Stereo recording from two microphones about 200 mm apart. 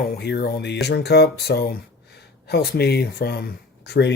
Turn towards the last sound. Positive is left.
turn(degrees=60)  # may be behind; listen again after turning